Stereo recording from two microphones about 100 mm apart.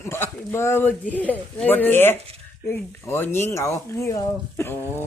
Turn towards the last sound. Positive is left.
turn(degrees=25)  # may be behind; listen again after turning